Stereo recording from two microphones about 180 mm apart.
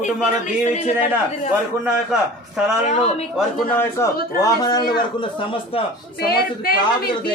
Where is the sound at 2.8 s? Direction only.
35° left (ahead or behind).